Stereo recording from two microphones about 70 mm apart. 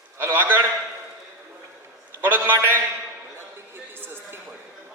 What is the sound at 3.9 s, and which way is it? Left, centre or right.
Music, right.